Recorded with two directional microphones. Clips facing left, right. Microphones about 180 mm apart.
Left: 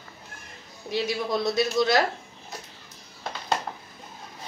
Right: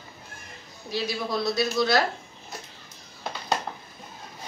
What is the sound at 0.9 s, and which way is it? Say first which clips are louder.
Speech: left 2 dB; 20° left (ahead or behind).